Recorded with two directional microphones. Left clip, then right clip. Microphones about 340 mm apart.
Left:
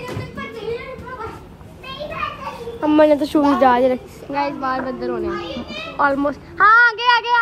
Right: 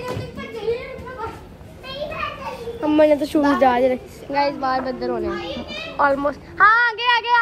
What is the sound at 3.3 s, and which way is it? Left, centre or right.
A woman's voice, centre.